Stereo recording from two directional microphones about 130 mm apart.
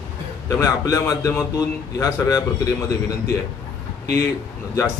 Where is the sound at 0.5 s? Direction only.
25° left (ahead or behind).